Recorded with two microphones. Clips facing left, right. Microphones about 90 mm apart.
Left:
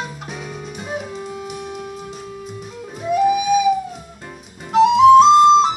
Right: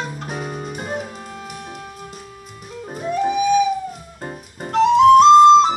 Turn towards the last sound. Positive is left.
turn(degrees=0)  # may be behind; listen again after turning